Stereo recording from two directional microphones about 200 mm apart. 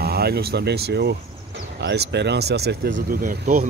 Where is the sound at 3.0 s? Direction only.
45° right (ahead or behind).